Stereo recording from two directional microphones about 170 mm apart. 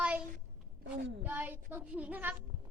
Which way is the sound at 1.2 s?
10° right (ahead or behind).